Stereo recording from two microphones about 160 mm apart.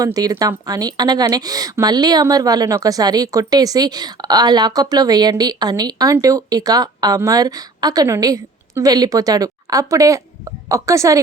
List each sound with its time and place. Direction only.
0.0 s speech: 25° right (ahead or behind)